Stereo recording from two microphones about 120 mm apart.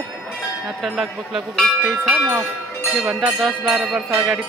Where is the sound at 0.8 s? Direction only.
Centre (ahead or behind).